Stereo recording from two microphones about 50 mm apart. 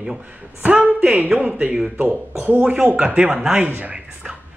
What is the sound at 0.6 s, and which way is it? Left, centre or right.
Speech, right.